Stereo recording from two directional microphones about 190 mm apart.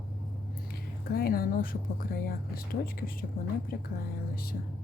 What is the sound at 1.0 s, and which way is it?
Speech, 50° left (ahead or behind).